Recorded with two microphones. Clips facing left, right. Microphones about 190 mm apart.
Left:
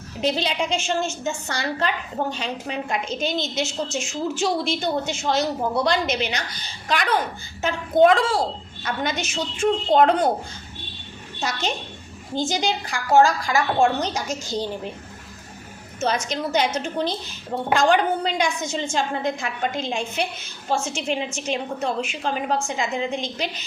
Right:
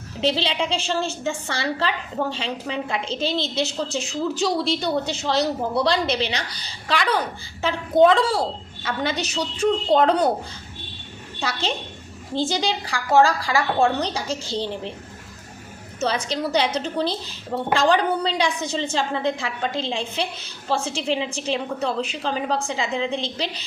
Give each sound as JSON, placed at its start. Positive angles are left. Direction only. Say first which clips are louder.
{"t": 0.2, "sound": "a woman's voice", "louder": "right 1 dB", "side_deg": -30}
{"t": 2.9, "sound": "a woman's voice", "louder": "left 1 dB", "side_deg": -30}
{"t": 11.3, "sound": "a child's voice", "louder": "even", "side_deg": -30}
{"t": 16.0, "sound": "a woman's voice", "louder": "even", "side_deg": -35}